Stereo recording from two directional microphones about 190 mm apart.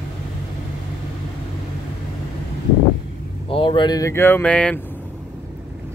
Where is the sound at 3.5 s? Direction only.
25° left (ahead or behind); by 4.8 s 5° left (ahead or behind).